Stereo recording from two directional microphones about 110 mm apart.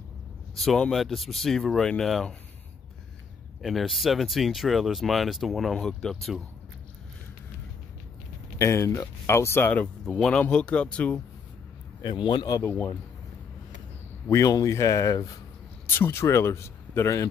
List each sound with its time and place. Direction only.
0.6 s speech: 5° left (ahead or behind)
3.6 s speech: centre (ahead or behind)
8.5 s speech: 25° left (ahead or behind)
10.0 s speech: 5° left (ahead or behind)
12.0 s speech: 45° left (ahead or behind)
12.6 s speech: 20° left (ahead or behind)
14.3 s speech: 30° left (ahead or behind)